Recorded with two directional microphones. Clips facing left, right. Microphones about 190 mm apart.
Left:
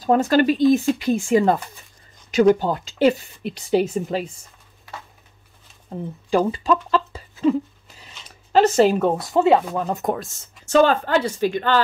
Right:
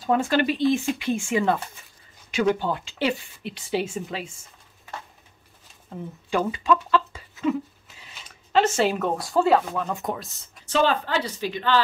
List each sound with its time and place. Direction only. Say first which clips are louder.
0.0 s a woman's voice: left 5 dB; 40° left (ahead or behind)
5.9 s a sound: left 6 dB; 35° left (ahead or behind)
8.5 s a woman's voice: left 6 dB; 40° left (ahead or behind); by 9.6 s 20° left (ahead or behind)
10.0 s speech: left 6 dB; 50° left (ahead or behind)